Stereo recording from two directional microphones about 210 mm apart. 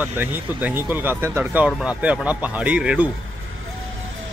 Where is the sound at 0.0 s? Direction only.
10° right (ahead or behind).